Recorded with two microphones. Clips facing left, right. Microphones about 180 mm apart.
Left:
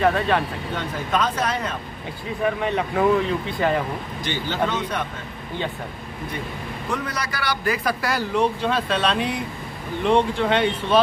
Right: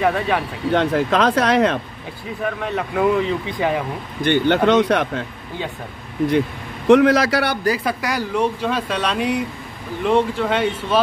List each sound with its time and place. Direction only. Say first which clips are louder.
0.0 s speech: right 1 dB; 5° right (ahead or behind)
0.7 s speech: right 9 dB; 80° right
2.4 s speech: left 1 dB; centre (ahead or behind)
3.4 s speech: right 1 dB; 15° right (ahead or behind)
4.2 s a man's voice: right 10 dB; 60° right (ahead or behind)
6.9 s a man's voice: right 17 dB; 90° right
7.6 s speech: right 3 dB; 30° right (ahead or behind)
8.0 s speech: right 1 dB; 10° right (ahead or behind)